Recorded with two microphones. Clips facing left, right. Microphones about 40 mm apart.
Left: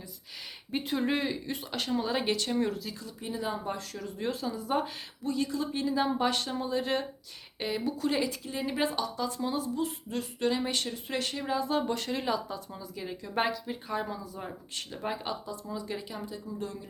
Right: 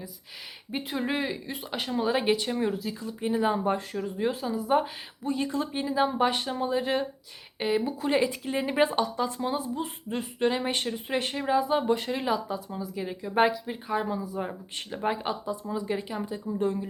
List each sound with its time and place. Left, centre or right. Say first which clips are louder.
0.7 s speech: even; centre
5.3 s speech: right 2 dB; right